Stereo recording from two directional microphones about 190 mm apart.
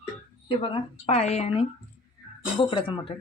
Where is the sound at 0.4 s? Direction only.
25° left (ahead or behind).